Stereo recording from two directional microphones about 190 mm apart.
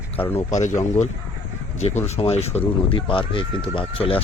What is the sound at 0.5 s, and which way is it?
Speech, 40° left (ahead or behind).